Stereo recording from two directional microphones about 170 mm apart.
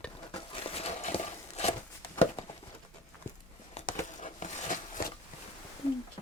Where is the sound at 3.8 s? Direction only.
40° left (ahead or behind).